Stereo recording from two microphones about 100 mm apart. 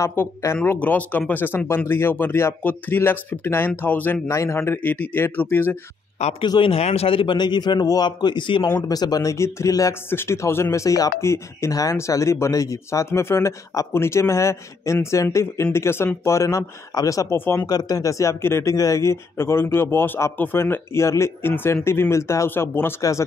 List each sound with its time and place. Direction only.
0.0 s speech: 25° left (ahead or behind)
4.3 s speech: 30° left (ahead or behind)
6.4 s a man's voice: 50° left (ahead or behind)
6.7 s a man's voice: 90° left; by 7.3 s 65° left (ahead or behind)
7.3 s a man's voice: 45° left (ahead or behind)
8.8 s speech: 40° left (ahead or behind)
17.6 s speech: 40° left (ahead or behind)